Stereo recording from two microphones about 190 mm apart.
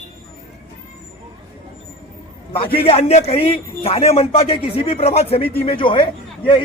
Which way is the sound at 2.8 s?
30° left (ahead or behind).